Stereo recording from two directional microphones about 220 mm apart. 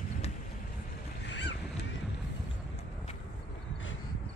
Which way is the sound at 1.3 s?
55° left (ahead or behind).